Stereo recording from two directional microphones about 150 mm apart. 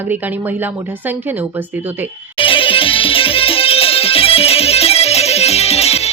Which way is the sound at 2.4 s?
35° left (ahead or behind).